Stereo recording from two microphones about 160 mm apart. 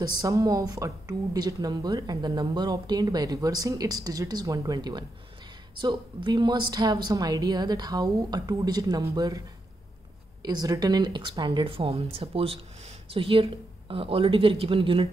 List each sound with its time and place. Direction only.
0.1 s speech: 20° right (ahead or behind)
10.4 s speech: 25° right (ahead or behind)